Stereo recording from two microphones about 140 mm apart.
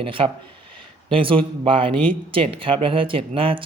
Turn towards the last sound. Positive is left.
turn(degrees=-40)  # may be behind; listen again after turning